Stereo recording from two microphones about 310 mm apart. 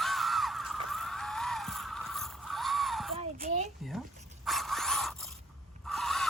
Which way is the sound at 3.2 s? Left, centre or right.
Right.